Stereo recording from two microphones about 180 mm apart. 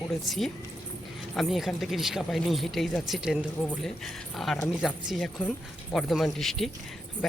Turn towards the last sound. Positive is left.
turn(degrees=0)  # may be behind; listen again after turning